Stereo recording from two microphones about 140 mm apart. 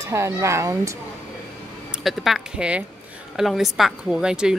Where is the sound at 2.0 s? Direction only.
Centre (ahead or behind).